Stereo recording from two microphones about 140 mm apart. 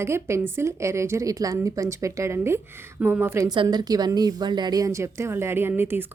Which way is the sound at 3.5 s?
30° right (ahead or behind).